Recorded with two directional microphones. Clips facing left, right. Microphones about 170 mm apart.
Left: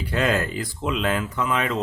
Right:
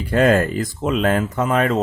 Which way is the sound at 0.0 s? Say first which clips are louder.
Right 7 dB; 50° right (ahead or behind).